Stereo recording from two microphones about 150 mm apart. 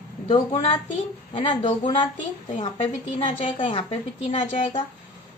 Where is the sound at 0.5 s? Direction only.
45° left (ahead or behind).